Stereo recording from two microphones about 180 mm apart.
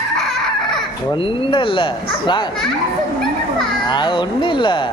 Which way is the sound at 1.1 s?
30° left (ahead or behind).